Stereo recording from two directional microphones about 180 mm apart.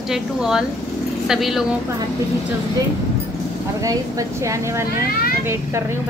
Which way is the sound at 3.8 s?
20° right (ahead or behind).